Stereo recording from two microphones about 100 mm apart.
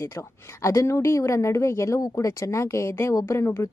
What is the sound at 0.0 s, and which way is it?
A woman's voice, 30° left (ahead or behind).